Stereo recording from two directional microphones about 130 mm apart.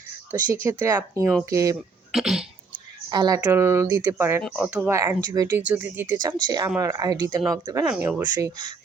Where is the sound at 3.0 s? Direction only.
30° right (ahead or behind).